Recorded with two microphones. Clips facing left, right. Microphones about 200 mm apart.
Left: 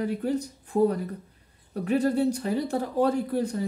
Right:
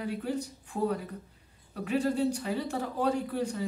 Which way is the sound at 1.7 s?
45° left (ahead or behind).